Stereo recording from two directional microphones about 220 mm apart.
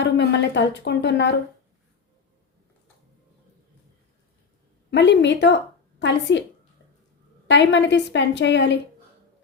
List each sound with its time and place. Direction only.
0.0 s a woman's voice: 50° left (ahead or behind)
4.9 s a woman's voice: 55° left (ahead or behind)
7.4 s a woman's voice: 55° left (ahead or behind)